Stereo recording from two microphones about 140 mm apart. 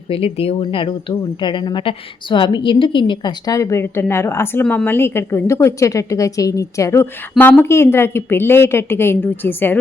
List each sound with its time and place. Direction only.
0.1 s a woman's voice: 45° left (ahead or behind); by 4.6 s 20° left (ahead or behind)
4.6 s a woman's voice: 10° left (ahead or behind)